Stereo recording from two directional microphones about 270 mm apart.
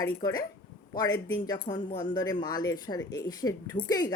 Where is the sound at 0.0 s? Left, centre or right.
Centre.